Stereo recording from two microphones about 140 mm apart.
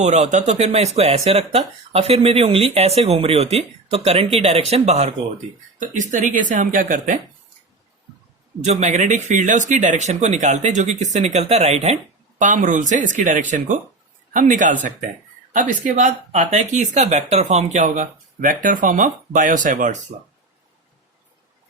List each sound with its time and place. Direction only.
0.0 s speech: 55° right (ahead or behind)
5.8 s speech: 65° right (ahead or behind)
8.6 s speech: 55° right (ahead or behind)
12.4 s speech: 65° right (ahead or behind)